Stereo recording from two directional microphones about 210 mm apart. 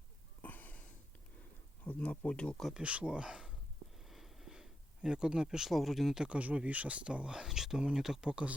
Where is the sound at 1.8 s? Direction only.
5° left (ahead or behind).